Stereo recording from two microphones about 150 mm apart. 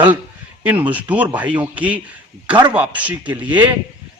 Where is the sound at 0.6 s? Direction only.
10° right (ahead or behind).